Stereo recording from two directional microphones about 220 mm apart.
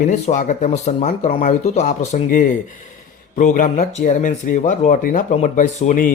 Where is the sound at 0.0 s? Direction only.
35° left (ahead or behind).